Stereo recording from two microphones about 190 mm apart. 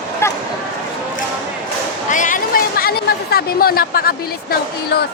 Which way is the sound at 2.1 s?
45° left (ahead or behind).